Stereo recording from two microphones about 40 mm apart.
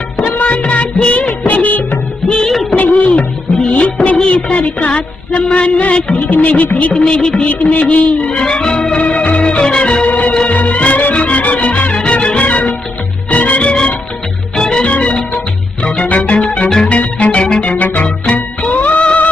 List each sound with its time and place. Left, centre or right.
0.2 s music of bollywood: left
1.5 s music of bollywood: left
2.2 s music of bollywood: left
2.8 s music of bollywood: left
4.3 s music: left
6.1 s music: left
6.9 s music: left
7.4 s music: left
8.3 s music: left
10.0 s music: left
12.4 s music: left
14.9 s music: left